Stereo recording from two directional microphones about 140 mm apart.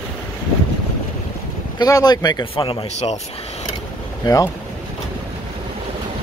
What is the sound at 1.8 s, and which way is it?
Speech, 30° left (ahead or behind).